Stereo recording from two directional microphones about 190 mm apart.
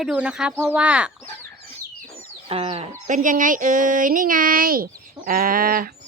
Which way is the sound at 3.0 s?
45° right (ahead or behind).